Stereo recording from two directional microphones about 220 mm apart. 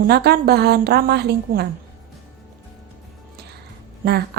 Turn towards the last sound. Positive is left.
turn(degrees=-40)  # may be behind; listen again after turning